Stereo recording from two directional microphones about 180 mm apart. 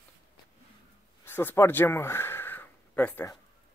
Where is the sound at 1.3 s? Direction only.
10° left (ahead or behind).